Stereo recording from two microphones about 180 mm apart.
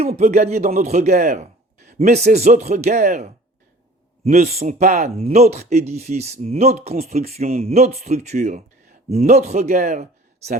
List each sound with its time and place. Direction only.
0.0 s a man's voice: 35° right (ahead or behind)